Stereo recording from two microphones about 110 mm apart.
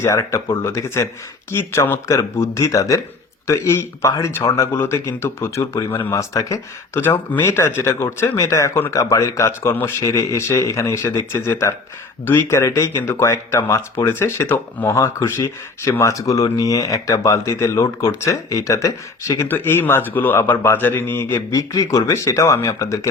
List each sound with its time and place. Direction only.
0.0 s speech: 25° left (ahead or behind)